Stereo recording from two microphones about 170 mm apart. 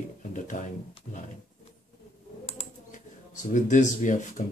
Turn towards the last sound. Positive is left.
turn(degrees=45)  # may be behind; listen again after turning